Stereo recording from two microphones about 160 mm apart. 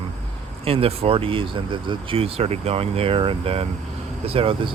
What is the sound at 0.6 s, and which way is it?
Speech, 40° right (ahead or behind).